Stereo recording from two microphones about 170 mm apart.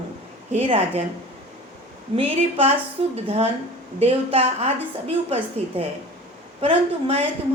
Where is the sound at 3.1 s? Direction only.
35° right (ahead or behind).